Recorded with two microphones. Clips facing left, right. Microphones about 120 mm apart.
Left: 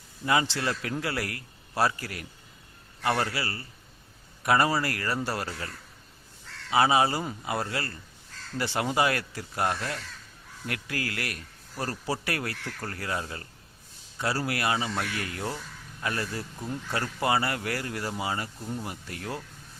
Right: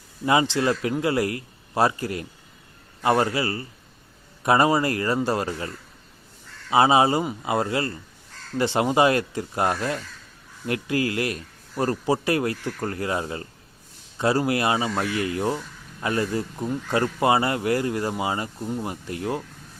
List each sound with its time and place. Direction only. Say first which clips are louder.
0.3 s speech: right 6 dB; 20° right (ahead or behind)